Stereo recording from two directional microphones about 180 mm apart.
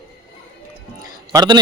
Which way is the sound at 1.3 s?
25° right (ahead or behind).